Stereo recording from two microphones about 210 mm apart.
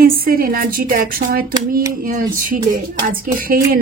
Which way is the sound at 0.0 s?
45° right (ahead or behind).